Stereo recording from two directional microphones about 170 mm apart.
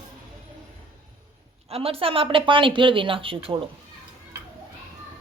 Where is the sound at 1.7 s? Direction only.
35° right (ahead or behind).